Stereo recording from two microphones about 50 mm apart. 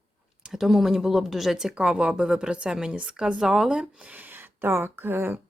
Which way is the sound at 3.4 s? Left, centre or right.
Centre.